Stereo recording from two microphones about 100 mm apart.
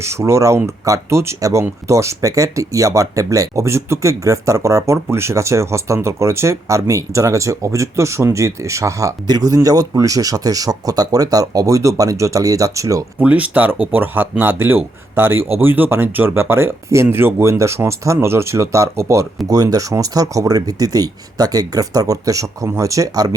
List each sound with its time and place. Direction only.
0.0 s speech: 30° right (ahead or behind)
13.1 s speech: 15° right (ahead or behind); by 23.3 s 35° right (ahead or behind)